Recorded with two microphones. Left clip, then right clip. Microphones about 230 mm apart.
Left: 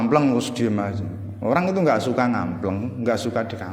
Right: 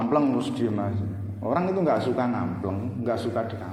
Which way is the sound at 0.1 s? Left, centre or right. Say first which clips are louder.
Left 4 dB; left.